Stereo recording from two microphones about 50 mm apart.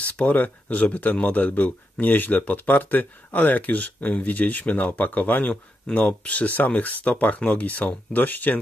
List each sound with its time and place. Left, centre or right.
0.0 s speech: left